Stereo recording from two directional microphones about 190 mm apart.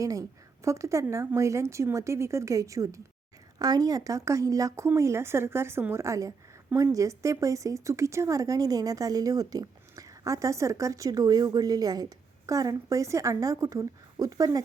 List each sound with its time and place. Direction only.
0.0 s speech: 15° right (ahead or behind)